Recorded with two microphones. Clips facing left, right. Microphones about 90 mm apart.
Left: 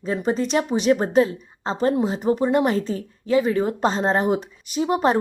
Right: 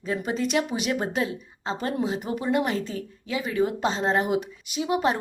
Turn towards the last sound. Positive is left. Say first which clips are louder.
# left 5 dB
turn(degrees=40)  # may be behind; listen again after turning